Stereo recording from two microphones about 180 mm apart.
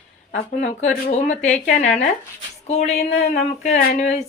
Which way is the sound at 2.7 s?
40° left (ahead or behind).